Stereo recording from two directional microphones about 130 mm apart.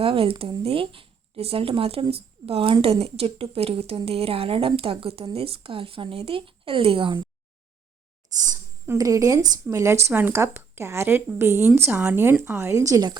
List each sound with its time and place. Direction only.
0.0 s speech: 45° right (ahead or behind)
9.0 s speech: 25° right (ahead or behind)